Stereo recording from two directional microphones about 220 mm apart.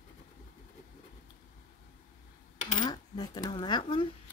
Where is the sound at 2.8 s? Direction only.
20° left (ahead or behind).